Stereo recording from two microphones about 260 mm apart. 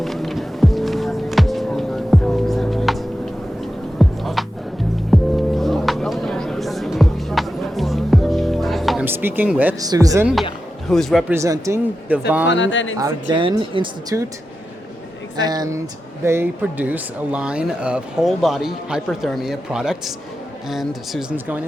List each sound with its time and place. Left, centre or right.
0.0 s music: centre
10.8 s speech: centre
12.5 s speech: left
13.0 s speech: centre
15.4 s speech: centre